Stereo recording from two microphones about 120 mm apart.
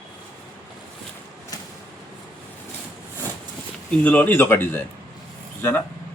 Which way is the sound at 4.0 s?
15° left (ahead or behind).